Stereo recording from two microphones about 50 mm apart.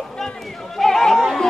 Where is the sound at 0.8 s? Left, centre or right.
Centre.